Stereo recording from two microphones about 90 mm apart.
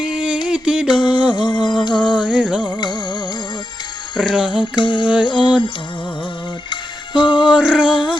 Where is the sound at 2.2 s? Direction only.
10° right (ahead or behind).